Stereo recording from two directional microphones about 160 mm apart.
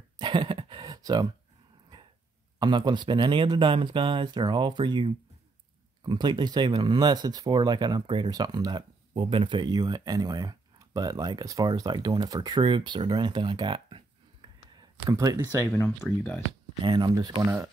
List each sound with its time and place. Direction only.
0.2 s a sound: 30° right (ahead or behind)
2.6 s speech: 25° right (ahead or behind)
15.6 s speech: 15° left (ahead or behind)
16.8 s speech: 30° right (ahead or behind)